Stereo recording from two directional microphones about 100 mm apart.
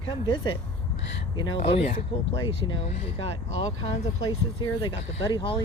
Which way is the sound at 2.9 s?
80° left.